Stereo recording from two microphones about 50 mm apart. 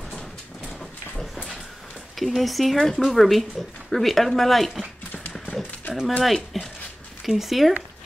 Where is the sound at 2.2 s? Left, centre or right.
Centre.